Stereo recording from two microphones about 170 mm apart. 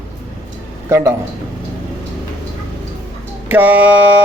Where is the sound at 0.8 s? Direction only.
15° right (ahead or behind).